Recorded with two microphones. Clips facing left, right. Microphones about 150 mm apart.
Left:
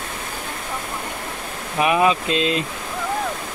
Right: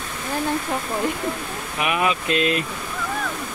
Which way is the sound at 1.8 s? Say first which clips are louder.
Left 5 dB; 30° left (ahead or behind).